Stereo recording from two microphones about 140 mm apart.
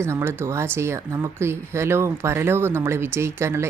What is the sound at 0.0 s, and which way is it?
A woman's voice, 20° right (ahead or behind).